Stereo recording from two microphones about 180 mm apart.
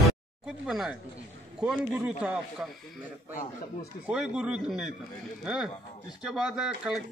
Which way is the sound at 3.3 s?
50° left (ahead or behind).